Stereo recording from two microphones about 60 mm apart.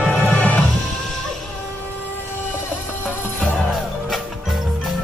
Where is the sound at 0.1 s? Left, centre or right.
Left.